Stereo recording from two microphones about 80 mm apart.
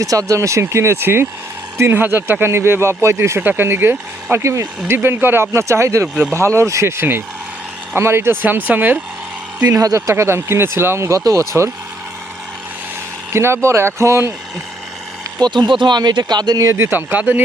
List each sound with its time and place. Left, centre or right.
0.0 s speech: right
9.6 s speech: right
11.2 s speech: right
13.3 s speech: right
15.4 s speech: right
16.7 s speech: right